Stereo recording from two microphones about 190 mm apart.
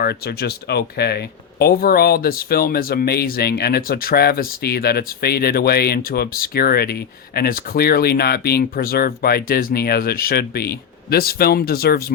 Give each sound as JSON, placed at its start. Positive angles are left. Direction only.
{"t": 0.0, "sound": "speech", "side_deg": 60}